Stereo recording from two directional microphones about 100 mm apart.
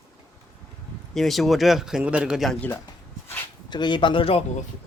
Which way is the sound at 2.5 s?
20° left (ahead or behind).